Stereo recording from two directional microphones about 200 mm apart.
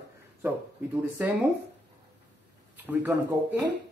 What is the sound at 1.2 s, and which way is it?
Speech, 10° right (ahead or behind).